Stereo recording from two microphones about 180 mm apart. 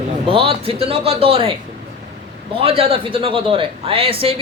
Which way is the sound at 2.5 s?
30° right (ahead or behind).